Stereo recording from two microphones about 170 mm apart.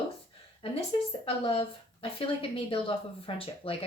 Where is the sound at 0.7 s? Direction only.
30° left (ahead or behind).